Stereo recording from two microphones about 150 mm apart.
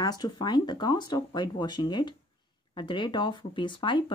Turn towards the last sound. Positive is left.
turn(degrees=30)  # may be behind; listen again after turning